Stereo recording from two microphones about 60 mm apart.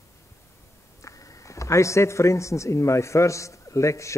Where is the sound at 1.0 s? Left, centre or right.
Left.